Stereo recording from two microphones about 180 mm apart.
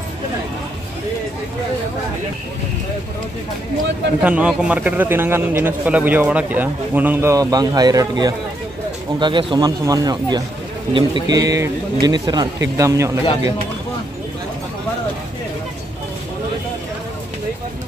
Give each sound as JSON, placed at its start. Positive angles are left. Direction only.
{"t": 4.2, "sound": "a man's voice", "side_deg": -5}